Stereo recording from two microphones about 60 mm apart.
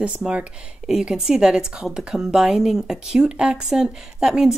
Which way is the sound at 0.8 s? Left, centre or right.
Centre.